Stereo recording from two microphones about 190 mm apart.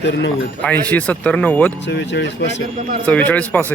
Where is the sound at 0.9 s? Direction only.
5° left (ahead or behind).